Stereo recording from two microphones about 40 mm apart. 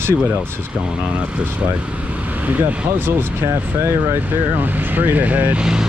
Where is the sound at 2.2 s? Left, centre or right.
Right.